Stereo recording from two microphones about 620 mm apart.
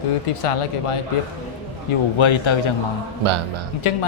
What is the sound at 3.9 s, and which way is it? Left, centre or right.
Speech, left.